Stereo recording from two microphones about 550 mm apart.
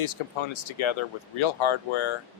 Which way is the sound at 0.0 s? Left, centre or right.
Left.